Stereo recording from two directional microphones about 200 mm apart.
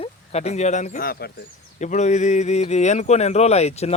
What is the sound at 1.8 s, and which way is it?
Speech, 35° left (ahead or behind).